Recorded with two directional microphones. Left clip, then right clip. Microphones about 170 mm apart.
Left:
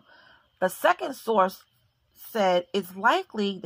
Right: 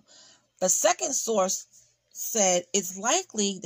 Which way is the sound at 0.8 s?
30° right (ahead or behind).